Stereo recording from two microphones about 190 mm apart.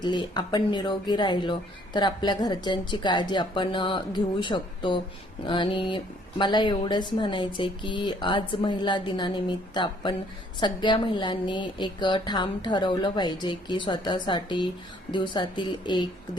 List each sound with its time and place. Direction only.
0.0 s speech: 25° left (ahead or behind)